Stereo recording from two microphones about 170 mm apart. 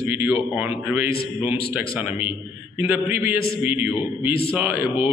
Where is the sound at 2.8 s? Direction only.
10° right (ahead or behind).